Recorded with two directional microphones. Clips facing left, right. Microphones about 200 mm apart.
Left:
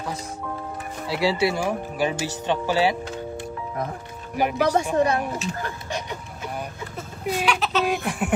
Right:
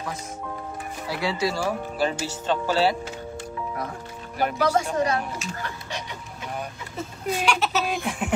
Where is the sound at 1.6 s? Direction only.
15° left (ahead or behind).